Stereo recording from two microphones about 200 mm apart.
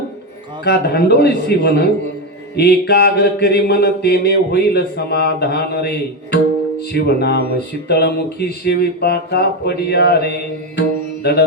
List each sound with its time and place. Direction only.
0.6 s a man's voice: 55° left (ahead or behind)
2.6 s mantra: 55° left (ahead or behind)
6.9 s a man's voice: 55° left (ahead or behind)
7.9 s mantra: 55° left (ahead or behind)
10.8 s music: 55° left (ahead or behind)